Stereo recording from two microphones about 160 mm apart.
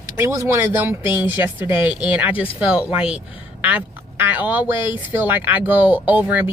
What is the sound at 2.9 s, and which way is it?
Speech, 5° right (ahead or behind).